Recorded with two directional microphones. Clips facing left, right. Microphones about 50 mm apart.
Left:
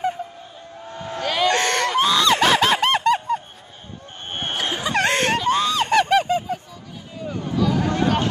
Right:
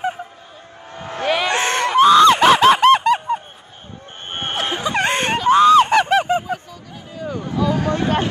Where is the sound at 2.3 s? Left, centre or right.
Centre.